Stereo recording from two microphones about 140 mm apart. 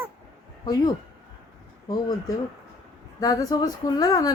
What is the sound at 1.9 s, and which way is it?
A woman's voice, 30° left (ahead or behind).